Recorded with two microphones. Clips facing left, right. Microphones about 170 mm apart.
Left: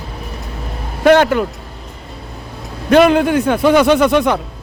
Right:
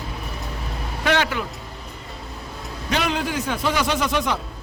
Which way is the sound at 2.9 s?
55° left (ahead or behind).